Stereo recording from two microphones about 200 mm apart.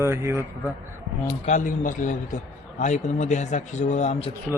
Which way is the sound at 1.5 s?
40° left (ahead or behind).